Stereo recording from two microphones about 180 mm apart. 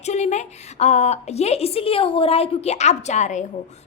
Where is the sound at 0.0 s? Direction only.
40° left (ahead or behind).